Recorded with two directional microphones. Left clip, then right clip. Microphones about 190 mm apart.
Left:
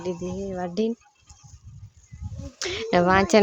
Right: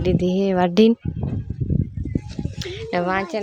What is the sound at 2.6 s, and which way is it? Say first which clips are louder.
Speech: left 3 dB; 20° left (ahead or behind).